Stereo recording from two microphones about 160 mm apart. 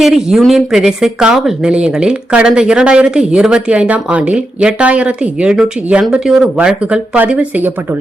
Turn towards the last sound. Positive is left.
turn(degrees=-10)  # may be behind; listen again after turning